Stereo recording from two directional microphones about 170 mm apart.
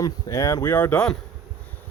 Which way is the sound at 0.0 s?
20° left (ahead or behind).